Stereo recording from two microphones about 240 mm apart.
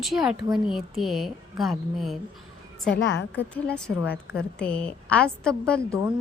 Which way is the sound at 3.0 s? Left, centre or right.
Left.